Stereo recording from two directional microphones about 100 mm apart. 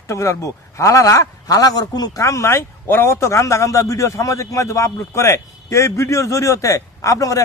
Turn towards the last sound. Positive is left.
turn(degrees=35)  # may be behind; listen again after turning